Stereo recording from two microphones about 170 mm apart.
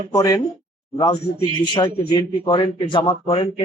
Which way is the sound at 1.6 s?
25° left (ahead or behind).